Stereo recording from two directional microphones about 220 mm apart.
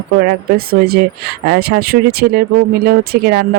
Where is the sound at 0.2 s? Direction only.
40° right (ahead or behind).